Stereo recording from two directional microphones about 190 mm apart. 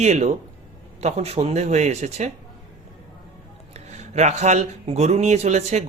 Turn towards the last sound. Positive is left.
turn(degrees=-35)  # may be behind; listen again after turning